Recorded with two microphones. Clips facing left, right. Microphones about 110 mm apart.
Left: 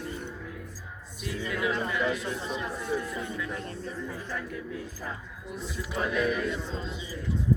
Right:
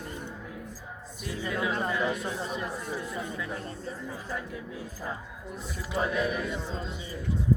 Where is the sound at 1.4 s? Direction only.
30° right (ahead or behind).